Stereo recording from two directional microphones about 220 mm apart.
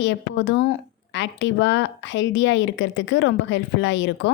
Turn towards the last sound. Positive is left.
turn(degrees=55)  # may be behind; listen again after turning